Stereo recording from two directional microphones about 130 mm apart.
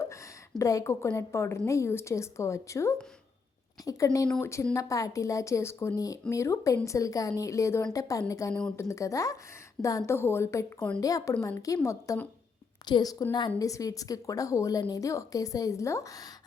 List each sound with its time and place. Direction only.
0.6 s a woman's voice: 25° left (ahead or behind)
12.8 s a woman's voice: 30° left (ahead or behind)